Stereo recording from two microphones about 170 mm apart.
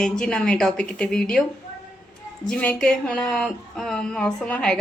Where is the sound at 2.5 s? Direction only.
5° left (ahead or behind).